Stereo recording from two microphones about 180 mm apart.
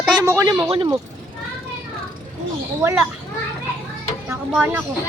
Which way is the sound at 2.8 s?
10° right (ahead or behind).